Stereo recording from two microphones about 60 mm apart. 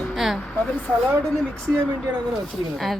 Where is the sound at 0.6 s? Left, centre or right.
Left.